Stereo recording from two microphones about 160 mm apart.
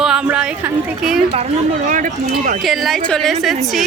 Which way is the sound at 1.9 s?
50° right (ahead or behind).